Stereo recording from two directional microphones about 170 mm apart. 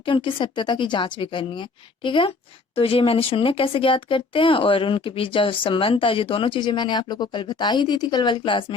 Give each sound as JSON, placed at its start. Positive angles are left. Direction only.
{"t": 0.0, "sound": "speech", "side_deg": 30}